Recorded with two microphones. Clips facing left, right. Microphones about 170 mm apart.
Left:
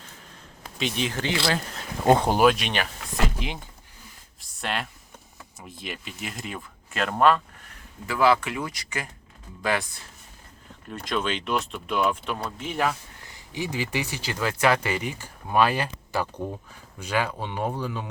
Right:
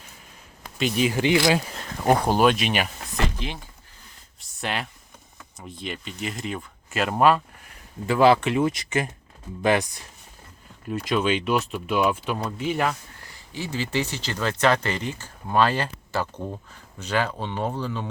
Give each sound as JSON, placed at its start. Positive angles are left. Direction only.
{"t": 0.8, "sound": "speech", "side_deg": -5}
{"t": 2.0, "sound": "speech", "side_deg": 20}
{"t": 2.4, "sound": "speech", "side_deg": 0}
{"t": 3.3, "sound": "speech", "side_deg": 15}
{"t": 4.4, "sound": "a sound", "side_deg": 0}
{"t": 5.5, "sound": "speech", "side_deg": 5}
{"t": 8.0, "sound": "speech", "side_deg": -25}
{"t": 10.8, "sound": "speech", "side_deg": -5}
{"t": 13.2, "sound": "speech", "side_deg": 20}